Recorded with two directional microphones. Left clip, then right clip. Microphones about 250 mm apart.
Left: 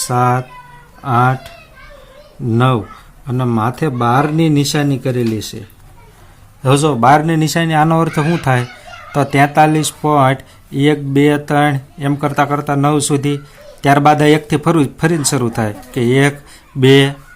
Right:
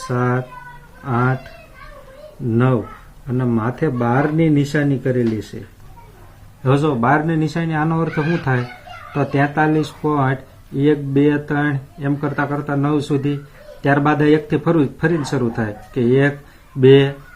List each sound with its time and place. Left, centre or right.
0.1 s speech: left
3.2 s speech: left
6.6 s speech: left